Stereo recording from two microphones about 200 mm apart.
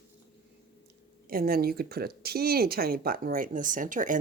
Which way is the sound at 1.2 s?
45° right (ahead or behind).